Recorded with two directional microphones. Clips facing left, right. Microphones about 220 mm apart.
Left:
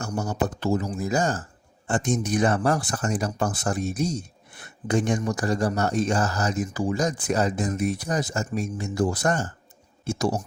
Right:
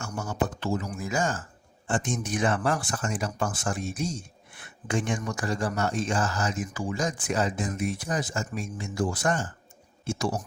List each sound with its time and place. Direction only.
0.0 s speech: 40° left (ahead or behind)